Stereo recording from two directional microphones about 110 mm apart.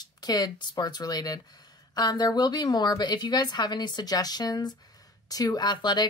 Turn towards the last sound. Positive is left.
turn(degrees=40)  # may be behind; listen again after turning